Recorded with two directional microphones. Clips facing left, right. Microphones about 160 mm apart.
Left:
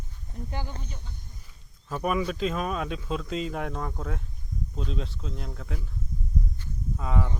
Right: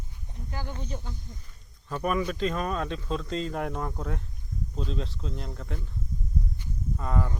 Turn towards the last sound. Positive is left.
turn(degrees=0)  # may be behind; listen again after turning